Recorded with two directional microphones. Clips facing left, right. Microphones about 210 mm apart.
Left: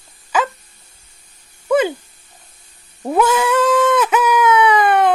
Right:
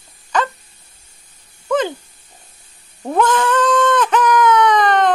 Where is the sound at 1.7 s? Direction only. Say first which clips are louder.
Left 3 dB; 10° left (ahead or behind).